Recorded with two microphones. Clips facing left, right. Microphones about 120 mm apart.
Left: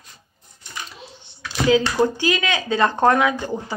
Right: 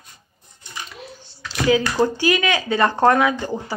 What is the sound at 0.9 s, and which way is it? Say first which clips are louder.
Computer keyboard: right 4 dB; 30° left (ahead or behind).